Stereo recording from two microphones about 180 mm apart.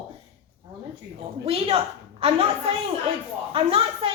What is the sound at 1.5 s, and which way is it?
Speech, 30° right (ahead or behind).